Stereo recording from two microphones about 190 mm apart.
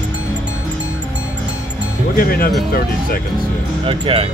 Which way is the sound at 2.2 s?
50° left (ahead or behind).